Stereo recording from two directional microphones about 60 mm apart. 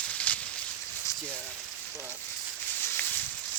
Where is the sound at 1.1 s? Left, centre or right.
Left.